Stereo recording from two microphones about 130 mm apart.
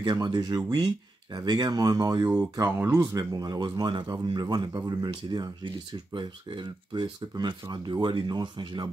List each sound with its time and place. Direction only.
0.0 s speech: 35° right (ahead or behind)